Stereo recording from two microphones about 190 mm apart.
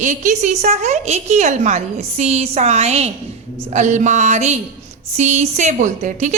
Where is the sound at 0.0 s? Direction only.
40° right (ahead or behind).